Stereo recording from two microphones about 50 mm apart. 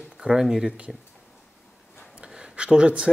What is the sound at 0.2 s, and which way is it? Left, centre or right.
Speech, centre.